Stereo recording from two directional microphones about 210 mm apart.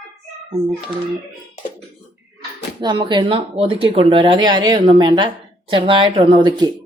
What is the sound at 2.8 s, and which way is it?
Speech, 20° right (ahead or behind).